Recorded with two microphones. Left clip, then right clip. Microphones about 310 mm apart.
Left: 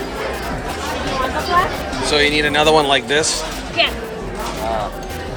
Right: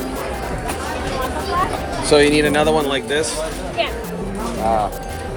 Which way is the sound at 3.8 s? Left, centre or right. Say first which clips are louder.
Left 5 dB; left.